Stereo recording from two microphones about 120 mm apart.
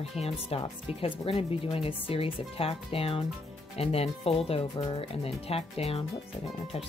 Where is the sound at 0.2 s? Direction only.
50° left (ahead or behind).